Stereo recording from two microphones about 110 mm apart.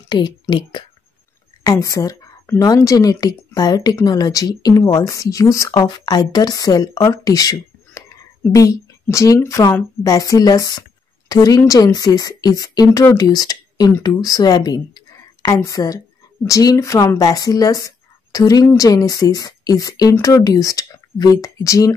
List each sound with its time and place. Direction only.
0.1 s speech: 45° left (ahead or behind)
1.6 s a woman's voice: 35° left (ahead or behind)